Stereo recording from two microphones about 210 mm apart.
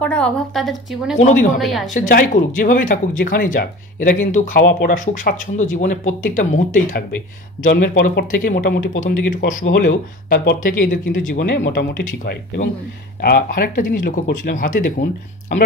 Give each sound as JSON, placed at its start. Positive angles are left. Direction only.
{"t": 0.0, "sound": "a woman's voice", "side_deg": 5}
{"t": 1.1, "sound": "speech", "side_deg": 35}
{"t": 1.6, "sound": "a woman's voice", "side_deg": 0}
{"t": 2.0, "sound": "speech", "side_deg": 40}
{"t": 12.0, "sound": "speech", "side_deg": 40}